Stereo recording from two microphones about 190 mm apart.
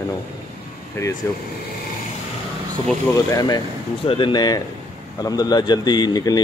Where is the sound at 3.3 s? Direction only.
20° left (ahead or behind).